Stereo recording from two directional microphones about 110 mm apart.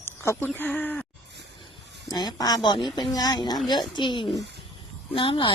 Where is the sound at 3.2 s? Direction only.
35° left (ahead or behind); by 5.5 s 50° left (ahead or behind).